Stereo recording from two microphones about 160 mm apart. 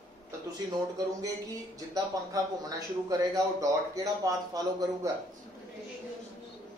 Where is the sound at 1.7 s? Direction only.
20° right (ahead or behind).